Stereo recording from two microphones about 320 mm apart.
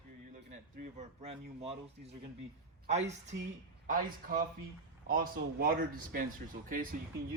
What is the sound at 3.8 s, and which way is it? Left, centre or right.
Speech, right.